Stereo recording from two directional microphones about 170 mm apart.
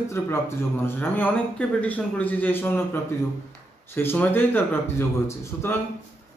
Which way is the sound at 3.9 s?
15° left (ahead or behind).